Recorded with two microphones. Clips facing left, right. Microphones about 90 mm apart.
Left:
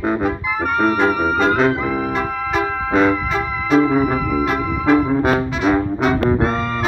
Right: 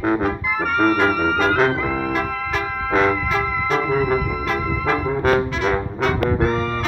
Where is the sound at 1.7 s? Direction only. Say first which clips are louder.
Left 2 dB; 15° left (ahead or behind).